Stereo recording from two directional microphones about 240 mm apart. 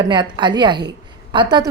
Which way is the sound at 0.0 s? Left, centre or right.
Centre.